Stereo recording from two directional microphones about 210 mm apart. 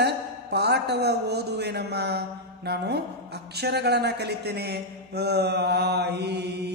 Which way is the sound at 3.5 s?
50° right (ahead or behind).